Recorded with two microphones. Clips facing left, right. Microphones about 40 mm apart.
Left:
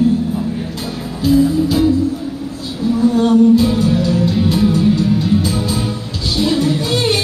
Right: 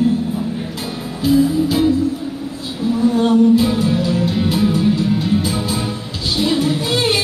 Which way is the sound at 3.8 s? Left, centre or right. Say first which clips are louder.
Left 2 dB; centre.